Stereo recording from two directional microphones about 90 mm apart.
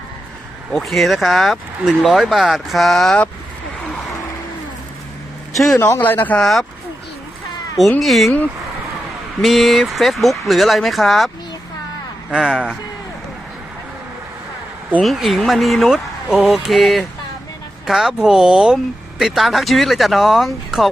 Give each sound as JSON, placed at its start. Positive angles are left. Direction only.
{"t": 0.7, "sound": "speech", "side_deg": 0}
{"t": 5.7, "sound": "speech", "side_deg": 25}
{"t": 6.3, "sound": "speech", "side_deg": 5}
{"t": 7.8, "sound": "speech", "side_deg": 0}
{"t": 9.4, "sound": "speech", "side_deg": 0}
{"t": 12.3, "sound": "speech", "side_deg": -5}
{"t": 15.0, "sound": "speech", "side_deg": 0}